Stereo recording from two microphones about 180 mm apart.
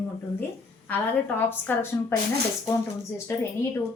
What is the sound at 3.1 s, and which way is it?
Speech, 15° left (ahead or behind).